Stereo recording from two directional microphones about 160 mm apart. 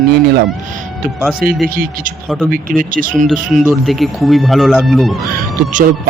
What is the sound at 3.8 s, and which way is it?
Speech, centre (ahead or behind).